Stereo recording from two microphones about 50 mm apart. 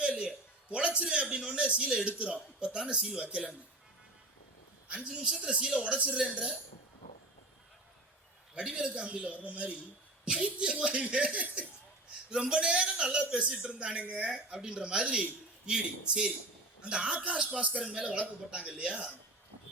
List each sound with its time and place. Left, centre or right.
0.0 s a sound: centre
0.9 s speech: right
5.1 s speech: right
8.5 s a man's voice: centre
12.3 s speech: centre
14.3 s a man's voice: centre